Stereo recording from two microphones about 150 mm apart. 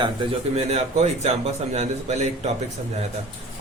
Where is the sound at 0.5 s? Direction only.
45° right (ahead or behind).